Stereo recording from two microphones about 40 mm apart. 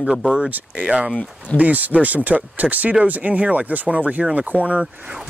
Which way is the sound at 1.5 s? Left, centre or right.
Right.